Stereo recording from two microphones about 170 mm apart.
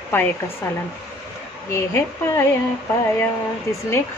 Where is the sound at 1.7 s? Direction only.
15° left (ahead or behind).